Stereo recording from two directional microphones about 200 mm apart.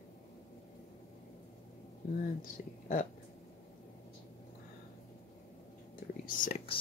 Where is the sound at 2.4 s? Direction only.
40° left (ahead or behind).